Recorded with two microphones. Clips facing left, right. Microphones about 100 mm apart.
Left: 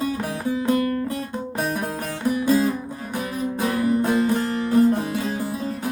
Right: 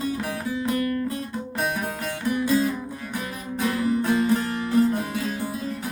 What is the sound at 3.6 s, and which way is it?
Music, 30° left (ahead or behind).